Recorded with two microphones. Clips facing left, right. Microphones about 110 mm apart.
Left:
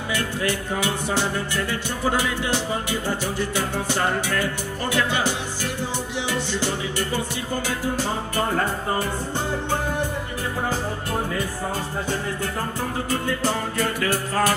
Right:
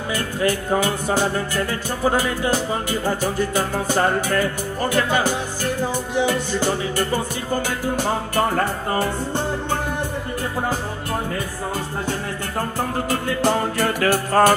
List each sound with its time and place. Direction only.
0.1 s music: 40° right (ahead or behind)
13.1 s music: 70° right (ahead or behind)